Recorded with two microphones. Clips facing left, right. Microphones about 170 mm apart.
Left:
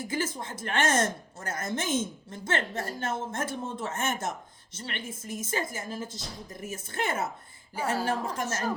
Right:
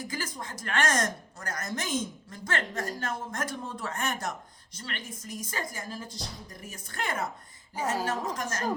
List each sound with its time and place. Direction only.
0.0 s a woman's voice: 25° left (ahead or behind)
8.1 s a woman's voice: 10° left (ahead or behind)